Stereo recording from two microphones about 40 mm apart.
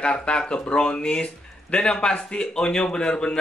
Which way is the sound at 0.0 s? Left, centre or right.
Left.